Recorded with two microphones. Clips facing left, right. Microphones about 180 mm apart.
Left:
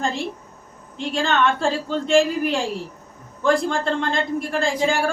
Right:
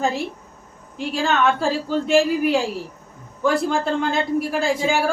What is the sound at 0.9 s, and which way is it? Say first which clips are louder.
A man's voice: even; 5° right (ahead or behind).